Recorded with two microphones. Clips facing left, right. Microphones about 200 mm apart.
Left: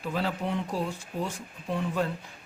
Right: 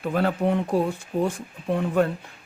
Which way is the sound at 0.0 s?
55° right (ahead or behind).